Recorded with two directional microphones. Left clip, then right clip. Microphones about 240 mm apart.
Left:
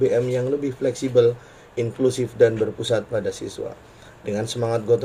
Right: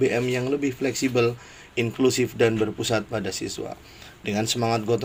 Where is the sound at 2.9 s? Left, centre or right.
Right.